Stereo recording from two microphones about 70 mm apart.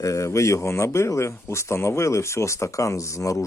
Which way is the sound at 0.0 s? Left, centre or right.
Left.